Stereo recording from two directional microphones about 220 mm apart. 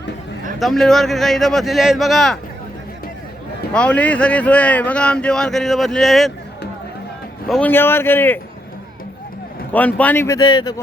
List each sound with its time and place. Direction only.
0.6 s speech: centre (ahead or behind)
3.7 s speech: 5° left (ahead or behind)
7.4 s a man's voice: 5° left (ahead or behind)
9.7 s a man's voice: 5° left (ahead or behind)